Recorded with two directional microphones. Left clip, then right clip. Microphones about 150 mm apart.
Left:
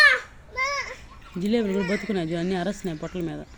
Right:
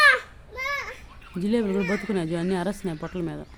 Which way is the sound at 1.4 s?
10° right (ahead or behind).